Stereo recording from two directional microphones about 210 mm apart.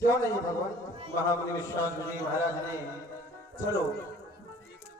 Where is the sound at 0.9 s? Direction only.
30° right (ahead or behind).